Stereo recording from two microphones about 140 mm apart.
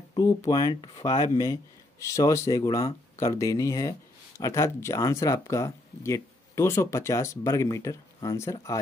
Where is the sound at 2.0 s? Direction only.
20° left (ahead or behind).